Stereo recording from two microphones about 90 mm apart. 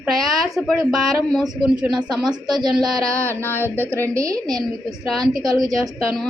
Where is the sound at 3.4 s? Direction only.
25° left (ahead or behind).